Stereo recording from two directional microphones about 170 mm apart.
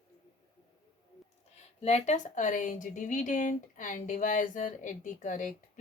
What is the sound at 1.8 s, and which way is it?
Speech, 40° left (ahead or behind).